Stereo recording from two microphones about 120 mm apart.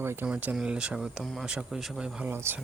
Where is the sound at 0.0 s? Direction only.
20° right (ahead or behind).